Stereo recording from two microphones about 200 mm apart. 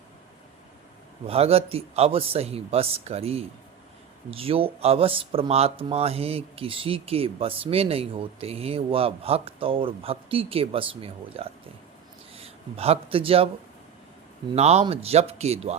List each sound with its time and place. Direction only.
1.3 s a man's voice: 30° right (ahead or behind)
14.5 s speech: 30° right (ahead or behind)